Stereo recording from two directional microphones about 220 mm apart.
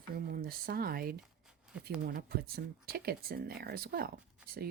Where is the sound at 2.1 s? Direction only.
40° right (ahead or behind).